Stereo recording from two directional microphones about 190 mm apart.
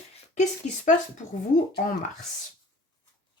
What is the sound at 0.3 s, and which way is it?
Speech, 40° left (ahead or behind).